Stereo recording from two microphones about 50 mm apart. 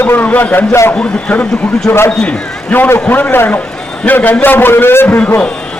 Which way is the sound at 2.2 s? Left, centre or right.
Left.